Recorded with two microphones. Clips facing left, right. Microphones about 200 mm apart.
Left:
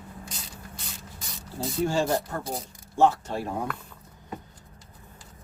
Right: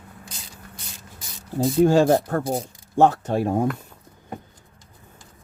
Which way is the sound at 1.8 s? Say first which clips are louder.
Right 9 dB; 50° right (ahead or behind).